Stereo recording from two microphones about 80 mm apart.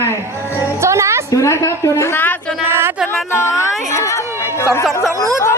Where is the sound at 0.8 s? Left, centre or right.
Right.